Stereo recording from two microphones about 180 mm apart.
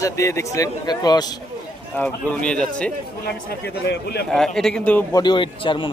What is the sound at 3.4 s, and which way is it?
Speech, 65° left (ahead or behind).